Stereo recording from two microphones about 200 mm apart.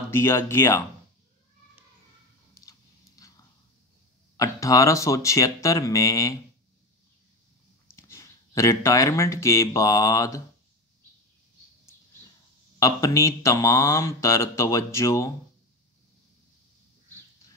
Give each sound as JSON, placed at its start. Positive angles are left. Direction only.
{"t": 0.1, "sound": "speech", "side_deg": 10}
{"t": 4.4, "sound": "speech", "side_deg": 15}
{"t": 8.1, "sound": "speech", "side_deg": 15}
{"t": 12.7, "sound": "speech", "side_deg": 15}